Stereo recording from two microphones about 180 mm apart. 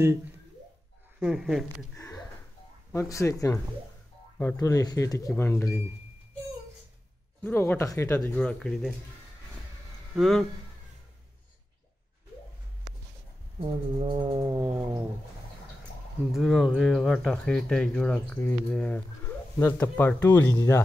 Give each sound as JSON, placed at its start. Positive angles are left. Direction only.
{"t": 1.2, "sound": "speech", "side_deg": -5}
{"t": 2.0, "sound": "a sound", "side_deg": 15}
{"t": 2.9, "sound": "speech", "side_deg": 15}
{"t": 7.4, "sound": "speech", "side_deg": 10}
{"t": 8.2, "sound": "speech", "side_deg": 5}
{"t": 10.1, "sound": "speech", "side_deg": 0}
{"t": 13.6, "sound": "speech", "side_deg": -25}
{"t": 16.3, "sound": "speech", "side_deg": 0}